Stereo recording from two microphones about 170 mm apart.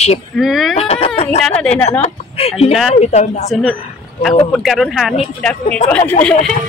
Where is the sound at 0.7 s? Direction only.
35° left (ahead or behind).